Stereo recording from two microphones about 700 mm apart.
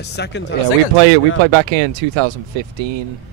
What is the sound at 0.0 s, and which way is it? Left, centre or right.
Speech, centre.